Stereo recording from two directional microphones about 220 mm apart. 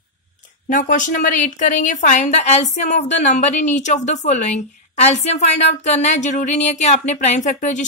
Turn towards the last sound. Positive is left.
turn(degrees=35)  # may be behind; listen again after turning